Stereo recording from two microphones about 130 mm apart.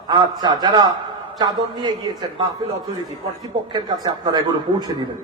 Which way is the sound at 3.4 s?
35° right (ahead or behind).